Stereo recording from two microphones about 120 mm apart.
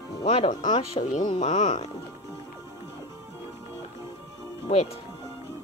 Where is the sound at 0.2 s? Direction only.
55° left (ahead or behind).